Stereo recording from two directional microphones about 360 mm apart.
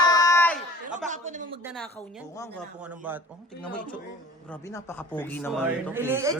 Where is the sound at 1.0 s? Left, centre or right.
Centre.